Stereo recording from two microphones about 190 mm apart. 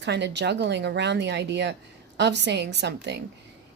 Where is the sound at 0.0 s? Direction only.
65° right (ahead or behind).